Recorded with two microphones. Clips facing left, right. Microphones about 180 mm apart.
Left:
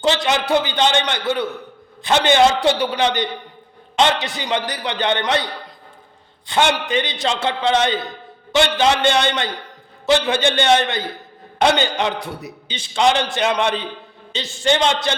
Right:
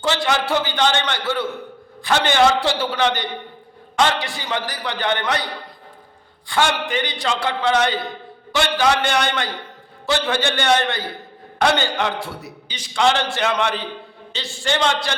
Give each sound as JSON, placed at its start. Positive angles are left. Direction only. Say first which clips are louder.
{"t": 0.0, "sound": "a man's voice", "louder": "left 2 dB", "side_deg": 20}
{"t": 6.5, "sound": "a man's voice", "louder": "left 2 dB", "side_deg": 20}